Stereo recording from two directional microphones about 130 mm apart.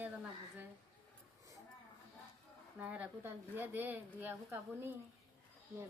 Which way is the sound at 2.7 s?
10° right (ahead or behind).